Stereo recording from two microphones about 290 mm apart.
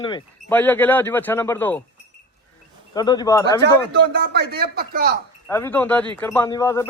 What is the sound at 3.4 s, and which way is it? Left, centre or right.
Speech, right.